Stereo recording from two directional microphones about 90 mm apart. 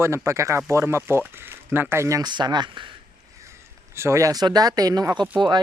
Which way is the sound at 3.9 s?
30° right (ahead or behind).